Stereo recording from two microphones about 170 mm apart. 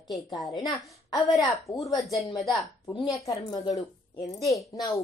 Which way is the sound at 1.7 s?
15° left (ahead or behind).